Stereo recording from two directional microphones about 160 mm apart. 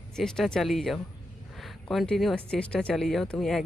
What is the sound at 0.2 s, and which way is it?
Speech, centre (ahead or behind).